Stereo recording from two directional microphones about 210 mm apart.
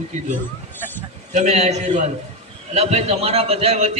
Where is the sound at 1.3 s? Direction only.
35° right (ahead or behind).